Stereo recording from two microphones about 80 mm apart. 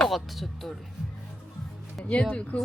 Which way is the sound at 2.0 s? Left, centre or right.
Centre.